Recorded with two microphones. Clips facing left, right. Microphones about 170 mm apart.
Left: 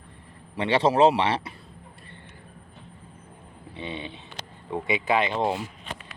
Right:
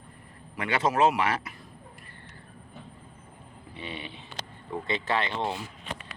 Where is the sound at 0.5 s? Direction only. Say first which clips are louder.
Left 5 dB; 30° left (ahead or behind).